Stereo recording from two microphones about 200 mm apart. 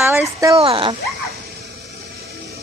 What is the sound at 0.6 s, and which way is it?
Speech, 25° right (ahead or behind).